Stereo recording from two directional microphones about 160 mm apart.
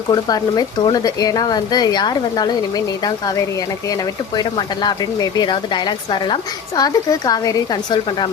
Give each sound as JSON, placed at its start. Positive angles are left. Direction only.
{"t": 0.1, "sound": "speech", "side_deg": 25}